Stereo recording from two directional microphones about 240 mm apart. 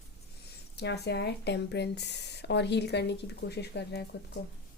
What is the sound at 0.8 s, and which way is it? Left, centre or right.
Speech, left.